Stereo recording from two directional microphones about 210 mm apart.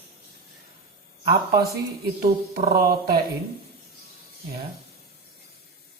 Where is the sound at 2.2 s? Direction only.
45° right (ahead or behind).